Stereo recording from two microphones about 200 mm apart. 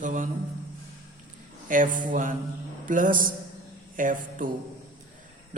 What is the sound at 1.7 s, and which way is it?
A man's voice, 40° right (ahead or behind).